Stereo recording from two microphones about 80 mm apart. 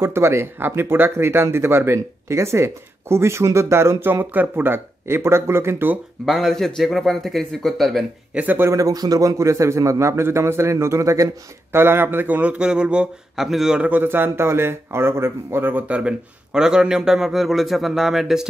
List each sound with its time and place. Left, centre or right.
0.0 s speech: right
6.2 s a man's voice: centre
8.4 s speech: right
8.6 s speech: right
11.7 s speech: right; by 13.8 s centre
13.8 s speech: right; by 18.5 s centre